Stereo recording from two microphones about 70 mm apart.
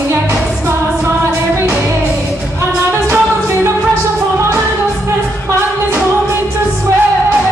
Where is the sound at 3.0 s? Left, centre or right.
Right.